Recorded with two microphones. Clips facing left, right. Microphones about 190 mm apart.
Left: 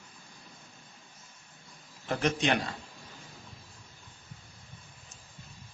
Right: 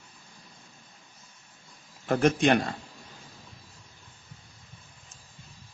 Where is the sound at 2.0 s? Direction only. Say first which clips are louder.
Right 6 dB; 50° right (ahead or behind).